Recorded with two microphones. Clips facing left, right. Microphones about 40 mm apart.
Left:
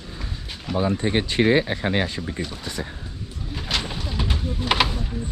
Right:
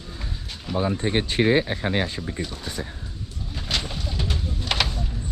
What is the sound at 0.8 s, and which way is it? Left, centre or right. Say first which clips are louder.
Speech: left 1 dB; left.